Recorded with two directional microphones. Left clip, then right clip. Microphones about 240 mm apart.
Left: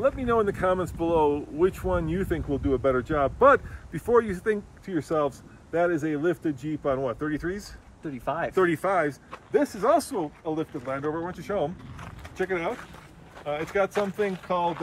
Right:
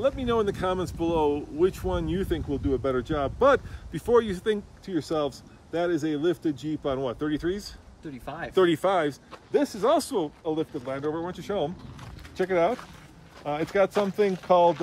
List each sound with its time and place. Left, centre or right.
0.0 s speech: centre
7.5 s speech: centre
8.5 s speech: right
12.4 s speech: right